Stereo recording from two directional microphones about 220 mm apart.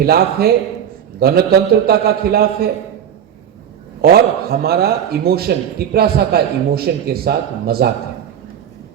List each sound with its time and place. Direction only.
0.0 s a man's voice: 45° right (ahead or behind)
4.0 s a man's voice: 45° right (ahead or behind)